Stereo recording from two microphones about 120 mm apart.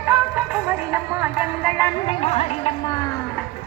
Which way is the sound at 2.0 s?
65° left (ahead or behind).